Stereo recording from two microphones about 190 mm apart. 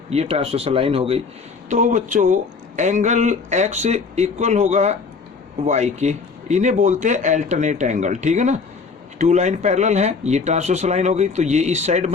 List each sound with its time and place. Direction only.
0.1 s speech: 35° right (ahead or behind)
1.7 s speech: 40° right (ahead or behind)